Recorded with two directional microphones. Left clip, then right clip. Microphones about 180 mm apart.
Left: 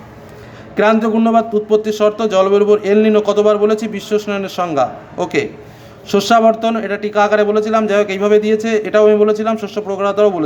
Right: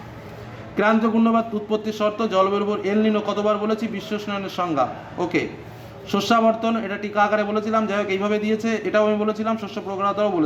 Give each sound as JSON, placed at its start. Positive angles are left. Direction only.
{"t": 0.8, "sound": "a man's voice", "side_deg": 20}